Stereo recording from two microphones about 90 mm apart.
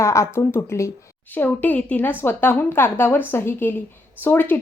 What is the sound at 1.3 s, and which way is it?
A woman's voice, 20° left (ahead or behind).